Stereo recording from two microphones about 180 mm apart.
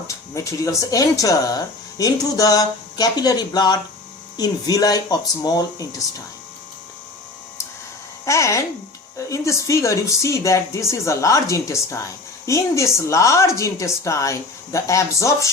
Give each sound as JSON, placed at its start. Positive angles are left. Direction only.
{"t": 0.3, "sound": "speech", "side_deg": 15}
{"t": 8.2, "sound": "a woman's voice", "side_deg": 15}